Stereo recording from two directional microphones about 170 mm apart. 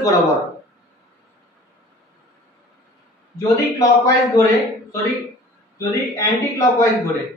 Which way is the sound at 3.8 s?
20° left (ahead or behind).